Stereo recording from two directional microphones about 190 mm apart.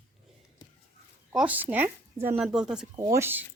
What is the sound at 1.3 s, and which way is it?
Speech, 5° right (ahead or behind).